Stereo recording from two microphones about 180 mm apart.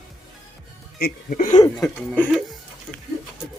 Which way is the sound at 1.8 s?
5° left (ahead or behind).